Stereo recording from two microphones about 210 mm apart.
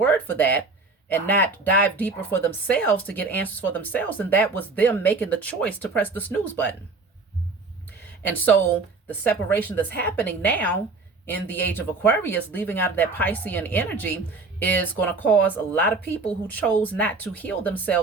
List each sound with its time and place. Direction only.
0.0 s a sound: 10° left (ahead or behind)
1.0 s speech: 10° left (ahead or behind)
8.3 s speech: 10° left (ahead or behind)